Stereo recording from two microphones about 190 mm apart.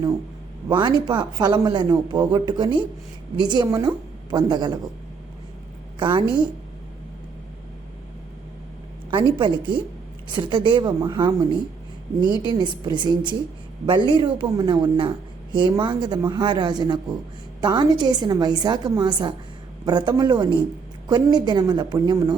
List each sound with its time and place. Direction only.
0.7 s speech: 25° right (ahead or behind)
6.0 s a woman's voice: 25° right (ahead or behind)
9.0 s speech: 25° right (ahead or behind)
12.5 s speech: 25° right (ahead or behind)